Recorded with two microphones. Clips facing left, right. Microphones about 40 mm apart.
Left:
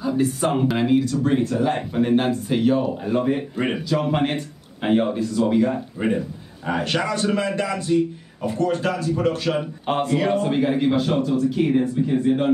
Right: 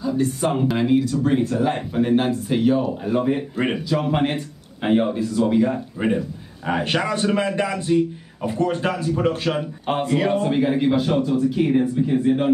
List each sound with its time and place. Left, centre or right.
0.0 s speech: centre
6.0 s a man's voice: right
9.8 s speech: centre